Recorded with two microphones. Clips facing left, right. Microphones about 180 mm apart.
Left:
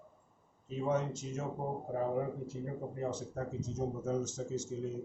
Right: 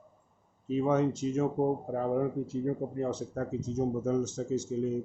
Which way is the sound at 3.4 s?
70° right (ahead or behind).